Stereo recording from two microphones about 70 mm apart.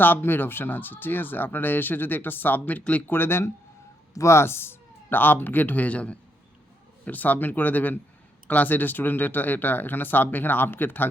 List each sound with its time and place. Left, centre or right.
0.0 s speech: left